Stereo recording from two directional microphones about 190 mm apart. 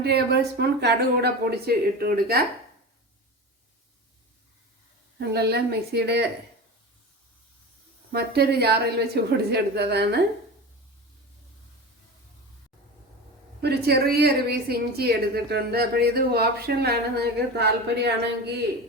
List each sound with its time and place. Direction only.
0.0 s a woman's voice: 60° right (ahead or behind)
5.2 s a woman's voice: 60° right (ahead or behind)
8.1 s a woman's voice: 55° right (ahead or behind)
13.6 s a woman's voice: 55° right (ahead or behind)